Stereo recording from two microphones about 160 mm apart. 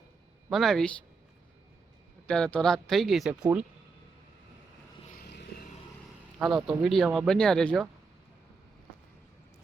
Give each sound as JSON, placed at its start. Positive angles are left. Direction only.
{"t": 0.5, "sound": "speech", "side_deg": 0}
{"t": 2.2, "sound": "speech", "side_deg": 5}
{"t": 5.1, "sound": "vehicle", "side_deg": 90}
{"t": 6.7, "sound": "speech", "side_deg": 0}